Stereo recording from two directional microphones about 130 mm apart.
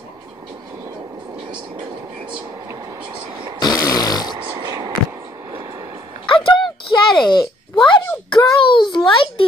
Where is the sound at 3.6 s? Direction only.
30° left (ahead or behind).